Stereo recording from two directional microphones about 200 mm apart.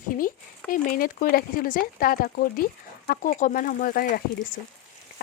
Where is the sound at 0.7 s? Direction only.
45° left (ahead or behind).